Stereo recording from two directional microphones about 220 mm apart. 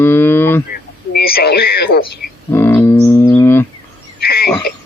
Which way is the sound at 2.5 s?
10° left (ahead or behind).